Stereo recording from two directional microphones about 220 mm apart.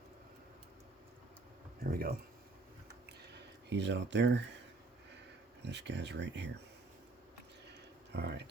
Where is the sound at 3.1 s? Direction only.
50° right (ahead or behind).